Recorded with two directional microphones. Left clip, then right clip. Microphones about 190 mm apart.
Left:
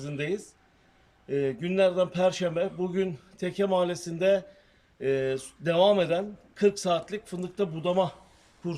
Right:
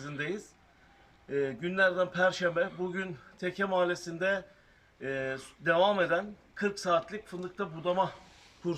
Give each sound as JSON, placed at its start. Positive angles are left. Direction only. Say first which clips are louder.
{"t": 0.2, "sound": "a man's voice", "louder": "left 5 dB", "side_deg": 15}
{"t": 8.6, "sound": "a man's voice", "louder": "right 1 dB", "side_deg": 10}